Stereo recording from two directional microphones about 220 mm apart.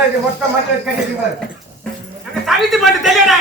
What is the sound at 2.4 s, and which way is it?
Speech, centre (ahead or behind).